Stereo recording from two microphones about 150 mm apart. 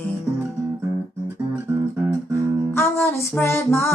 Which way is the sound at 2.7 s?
15° left (ahead or behind).